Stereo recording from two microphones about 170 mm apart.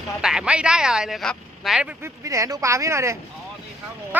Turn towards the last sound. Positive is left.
turn(degrees=-15)  # may be behind; listen again after turning